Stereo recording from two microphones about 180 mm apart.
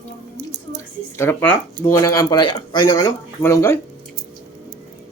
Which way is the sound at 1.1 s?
15° left (ahead or behind).